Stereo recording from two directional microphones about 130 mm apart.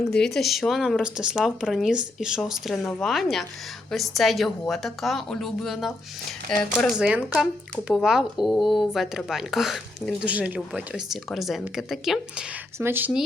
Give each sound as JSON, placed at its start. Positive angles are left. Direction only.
{"t": 0.1, "sound": "speech", "side_deg": 5}
{"t": 12.8, "sound": "speech", "side_deg": -15}